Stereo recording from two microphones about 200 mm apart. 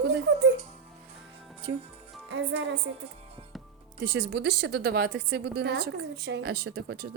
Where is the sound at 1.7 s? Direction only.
60° right (ahead or behind).